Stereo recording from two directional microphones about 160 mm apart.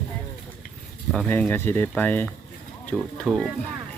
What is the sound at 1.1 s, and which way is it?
Speech, 5° left (ahead or behind).